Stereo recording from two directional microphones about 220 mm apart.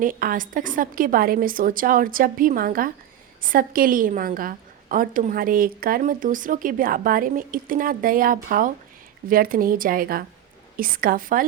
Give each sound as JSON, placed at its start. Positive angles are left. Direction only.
{"t": 0.0, "sound": "a woman's voice", "side_deg": -40}